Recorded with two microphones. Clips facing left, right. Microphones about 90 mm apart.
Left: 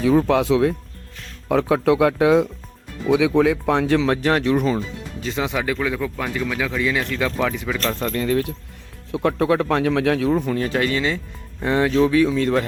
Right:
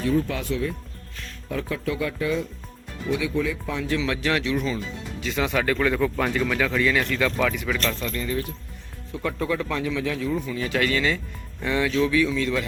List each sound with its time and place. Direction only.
0.0 s speech: 85° left
3.1 s speech: 90° left; by 4.0 s 70° left (ahead or behind)
4.0 s speech: 40° left (ahead or behind)
5.4 s speech: 15° left (ahead or behind)
7.9 s speech: 60° left (ahead or behind)
10.7 s speech: 30° left (ahead or behind); by 12.6 s 45° left (ahead or behind)